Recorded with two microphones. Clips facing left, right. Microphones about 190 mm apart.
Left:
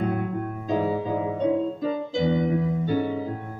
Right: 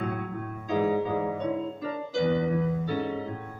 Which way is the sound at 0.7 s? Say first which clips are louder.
Even; 30° left (ahead or behind).